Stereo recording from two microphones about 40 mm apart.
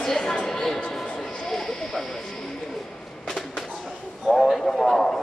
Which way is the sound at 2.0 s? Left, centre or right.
Centre.